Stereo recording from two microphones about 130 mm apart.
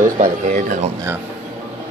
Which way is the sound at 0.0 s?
85° right.